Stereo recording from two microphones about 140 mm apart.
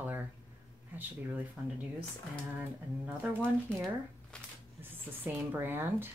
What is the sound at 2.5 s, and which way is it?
Speech, 10° right (ahead or behind).